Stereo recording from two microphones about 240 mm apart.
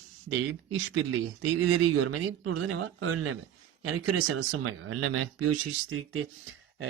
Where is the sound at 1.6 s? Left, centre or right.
Right.